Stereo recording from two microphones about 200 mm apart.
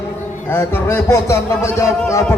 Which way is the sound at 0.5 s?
10° left (ahead or behind).